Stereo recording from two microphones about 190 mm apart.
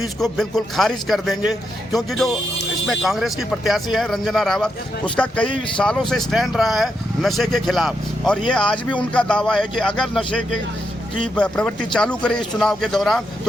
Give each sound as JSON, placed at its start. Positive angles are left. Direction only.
{"t": 0.0, "sound": "speech", "side_deg": 0}